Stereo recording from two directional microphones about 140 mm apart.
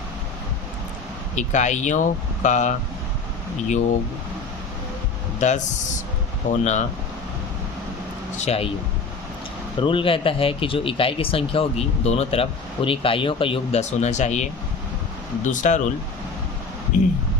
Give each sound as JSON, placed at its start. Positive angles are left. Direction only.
{"t": 1.4, "sound": "speech", "side_deg": 60}
{"t": 5.4, "sound": "speech", "side_deg": 60}
{"t": 8.4, "sound": "speech", "side_deg": 45}
{"t": 9.8, "sound": "speech", "side_deg": 40}
{"t": 15.4, "sound": "speech", "side_deg": 60}
{"t": 16.9, "sound": "speech", "side_deg": 65}